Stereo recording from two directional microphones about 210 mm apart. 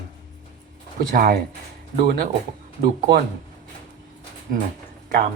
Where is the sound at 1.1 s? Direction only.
45° right (ahead or behind).